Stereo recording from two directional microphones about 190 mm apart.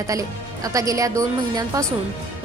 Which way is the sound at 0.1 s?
15° right (ahead or behind).